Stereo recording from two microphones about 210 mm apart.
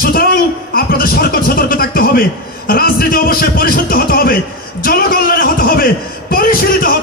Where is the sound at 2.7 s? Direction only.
45° left (ahead or behind).